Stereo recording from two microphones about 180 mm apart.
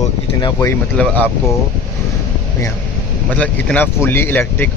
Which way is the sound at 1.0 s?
10° left (ahead or behind).